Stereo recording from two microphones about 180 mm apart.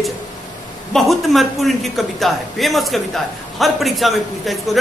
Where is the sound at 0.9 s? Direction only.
Centre (ahead or behind).